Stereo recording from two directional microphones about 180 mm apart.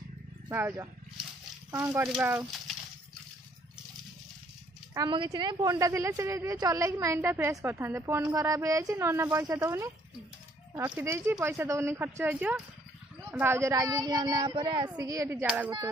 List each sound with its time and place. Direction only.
0.5 s a woman's voice: 10° right (ahead or behind)
4.9 s a woman's voice: 25° right (ahead or behind)
15.4 s a woman's voice: 5° right (ahead or behind)